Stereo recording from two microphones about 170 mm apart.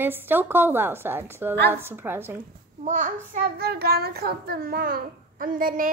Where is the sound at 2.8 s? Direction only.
50° right (ahead or behind).